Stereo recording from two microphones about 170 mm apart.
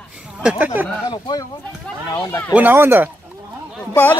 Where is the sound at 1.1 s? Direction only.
25° left (ahead or behind).